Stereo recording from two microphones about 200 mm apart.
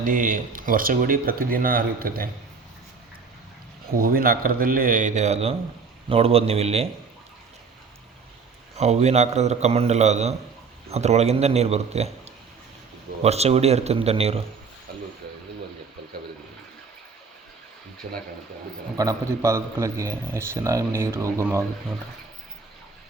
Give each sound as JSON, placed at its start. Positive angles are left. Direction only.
{"t": 0.0, "sound": "speech", "side_deg": -45}
{"t": 3.9, "sound": "a man's voice", "side_deg": -45}
{"t": 8.7, "sound": "a man's voice", "side_deg": -35}
{"t": 18.0, "sound": "speech", "side_deg": -45}
{"t": 18.9, "sound": "a man's voice", "side_deg": -15}